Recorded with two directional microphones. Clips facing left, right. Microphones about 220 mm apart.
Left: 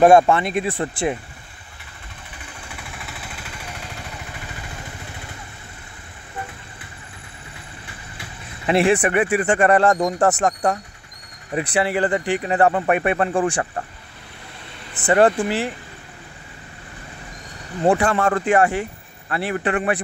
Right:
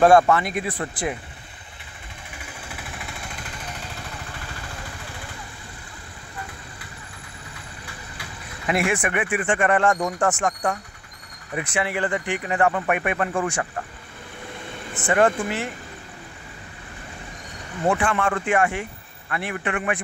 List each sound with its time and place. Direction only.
0.0 s speech: 25° left (ahead or behind)
8.6 s speech: 30° left (ahead or behind)
15.0 s speech: 35° left (ahead or behind)
17.8 s speech: 35° left (ahead or behind)